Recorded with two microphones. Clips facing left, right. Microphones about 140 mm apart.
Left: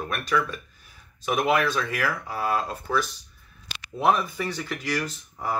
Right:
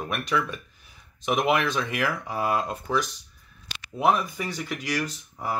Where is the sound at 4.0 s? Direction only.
Centre (ahead or behind).